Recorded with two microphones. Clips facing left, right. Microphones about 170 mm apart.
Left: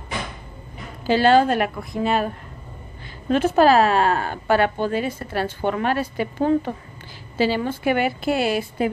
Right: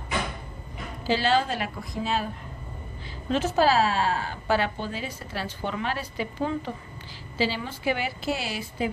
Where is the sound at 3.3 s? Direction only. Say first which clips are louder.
Left 6 dB; 55° left (ahead or behind).